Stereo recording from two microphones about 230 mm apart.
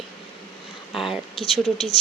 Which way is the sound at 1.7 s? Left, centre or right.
Left.